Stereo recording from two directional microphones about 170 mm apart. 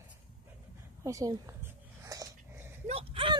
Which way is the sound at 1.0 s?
20° right (ahead or behind).